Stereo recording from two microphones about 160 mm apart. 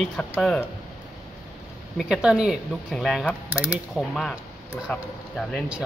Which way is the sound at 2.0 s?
5° right (ahead or behind).